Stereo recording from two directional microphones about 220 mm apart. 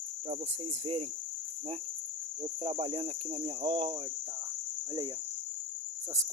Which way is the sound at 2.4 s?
25° right (ahead or behind).